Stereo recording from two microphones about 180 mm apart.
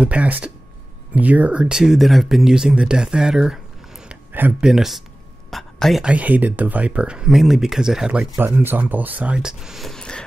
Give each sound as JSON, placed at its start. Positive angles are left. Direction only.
{"t": 0.0, "sound": "speech", "side_deg": -5}